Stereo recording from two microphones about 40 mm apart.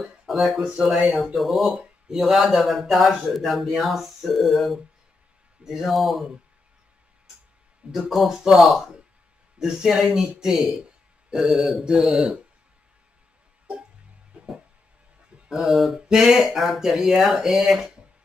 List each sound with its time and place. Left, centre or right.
0.0 s speech: centre
7.9 s speech: centre
14.3 s music: right
15.5 s speech: centre